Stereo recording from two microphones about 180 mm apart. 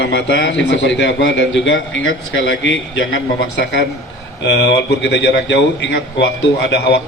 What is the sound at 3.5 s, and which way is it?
A man's voice, 70° left (ahead or behind).